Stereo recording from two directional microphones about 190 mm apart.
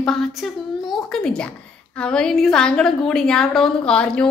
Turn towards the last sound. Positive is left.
turn(degrees=5)  # may be behind; listen again after turning